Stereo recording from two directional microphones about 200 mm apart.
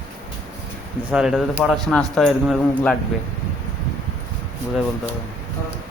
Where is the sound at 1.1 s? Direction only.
5° right (ahead or behind).